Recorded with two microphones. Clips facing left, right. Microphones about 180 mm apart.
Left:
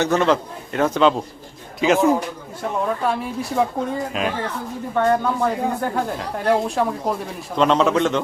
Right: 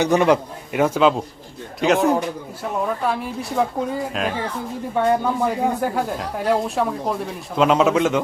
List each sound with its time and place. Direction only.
0.0 s a man's voice: 15° right (ahead or behind)
4.9 s a man's voice: 10° right (ahead or behind)